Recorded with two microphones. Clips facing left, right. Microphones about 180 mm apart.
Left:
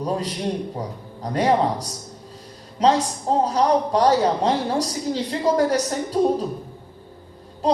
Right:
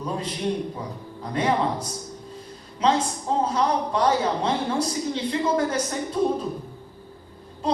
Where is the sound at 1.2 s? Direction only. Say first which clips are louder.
Left 4 dB; 40° left (ahead or behind).